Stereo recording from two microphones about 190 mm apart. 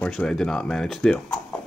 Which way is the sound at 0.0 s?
5° left (ahead or behind).